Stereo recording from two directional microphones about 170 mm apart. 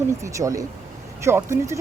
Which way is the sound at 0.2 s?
20° right (ahead or behind).